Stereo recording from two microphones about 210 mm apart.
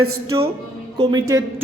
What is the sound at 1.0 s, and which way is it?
Speech, 20° right (ahead or behind).